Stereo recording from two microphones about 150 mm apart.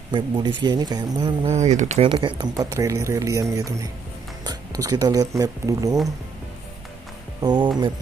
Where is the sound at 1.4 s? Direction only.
50° right (ahead or behind).